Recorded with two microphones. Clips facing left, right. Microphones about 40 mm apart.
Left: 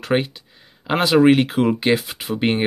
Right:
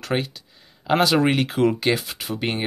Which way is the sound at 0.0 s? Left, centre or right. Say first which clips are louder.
Left 5 dB; left.